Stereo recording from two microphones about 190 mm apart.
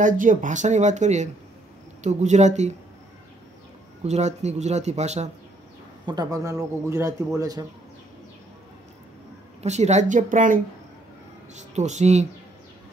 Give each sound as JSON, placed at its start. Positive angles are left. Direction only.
{"t": 0.0, "sound": "speech", "side_deg": -45}
{"t": 4.0, "sound": "speech", "side_deg": -35}
{"t": 6.0, "sound": "a man's voice", "side_deg": -20}
{"t": 9.6, "sound": "speech", "side_deg": -35}